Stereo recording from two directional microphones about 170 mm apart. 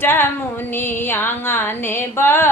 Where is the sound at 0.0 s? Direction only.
15° left (ahead or behind).